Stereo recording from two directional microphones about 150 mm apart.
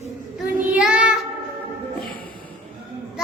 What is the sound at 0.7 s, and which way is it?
Child singing, 5° right (ahead or behind).